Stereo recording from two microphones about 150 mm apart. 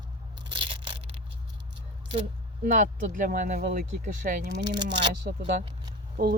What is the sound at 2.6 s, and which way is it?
Speech, 65° right (ahead or behind).